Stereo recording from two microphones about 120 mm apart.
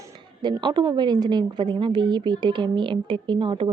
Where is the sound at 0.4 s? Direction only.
35° right (ahead or behind).